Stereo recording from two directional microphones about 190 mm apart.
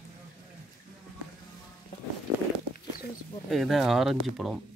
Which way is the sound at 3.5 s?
Centre (ahead or behind).